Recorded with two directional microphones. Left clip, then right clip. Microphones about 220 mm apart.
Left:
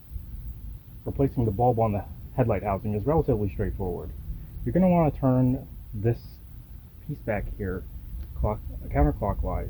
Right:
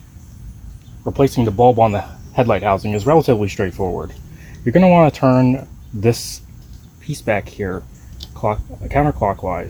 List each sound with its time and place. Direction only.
1.1 s speech: 45° right (ahead or behind)
7.1 s cricket: 40° right (ahead or behind)